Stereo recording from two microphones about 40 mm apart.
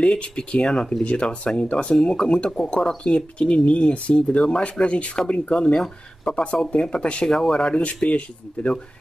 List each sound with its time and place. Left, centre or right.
0.0 s speech: left
7.2 s speech: centre
7.7 s speech: left